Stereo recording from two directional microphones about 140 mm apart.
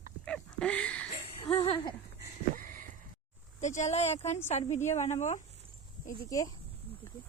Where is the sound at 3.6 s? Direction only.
55° left (ahead or behind).